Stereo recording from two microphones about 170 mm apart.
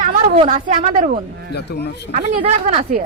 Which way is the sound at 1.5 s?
80° left.